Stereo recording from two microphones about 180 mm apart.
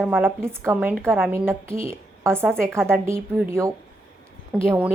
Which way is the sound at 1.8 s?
15° right (ahead or behind).